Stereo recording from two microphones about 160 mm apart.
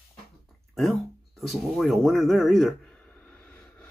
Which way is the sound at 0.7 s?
Centre (ahead or behind).